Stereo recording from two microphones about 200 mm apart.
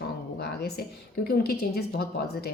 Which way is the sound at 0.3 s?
50° left (ahead or behind).